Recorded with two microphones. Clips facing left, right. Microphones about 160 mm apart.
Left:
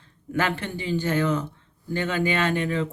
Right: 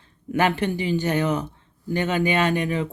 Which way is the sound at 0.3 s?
15° right (ahead or behind).